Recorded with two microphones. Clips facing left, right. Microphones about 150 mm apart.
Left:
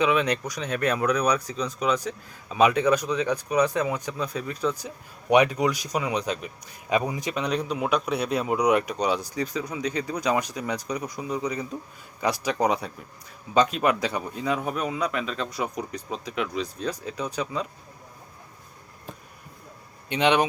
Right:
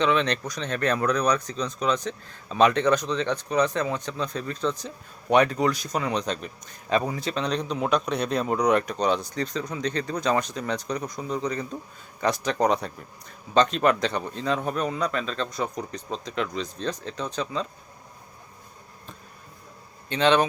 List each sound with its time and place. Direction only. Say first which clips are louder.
0.0 s speech: even; 10° left (ahead or behind)
20.1 s speech: right 1 dB; 15° left (ahead or behind)